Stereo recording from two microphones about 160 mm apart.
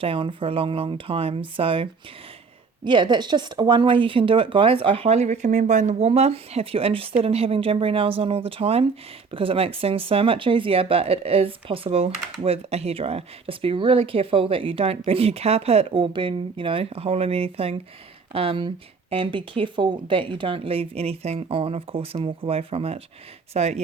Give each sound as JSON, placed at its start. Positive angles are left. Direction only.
{"t": 0.0, "sound": "speech", "side_deg": -35}